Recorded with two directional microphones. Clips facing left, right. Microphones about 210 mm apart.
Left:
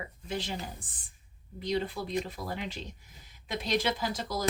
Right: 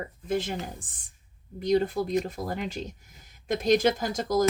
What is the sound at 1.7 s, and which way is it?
Speech, 45° right (ahead or behind).